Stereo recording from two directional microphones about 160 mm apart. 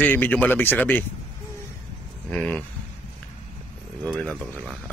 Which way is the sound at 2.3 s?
10° left (ahead or behind).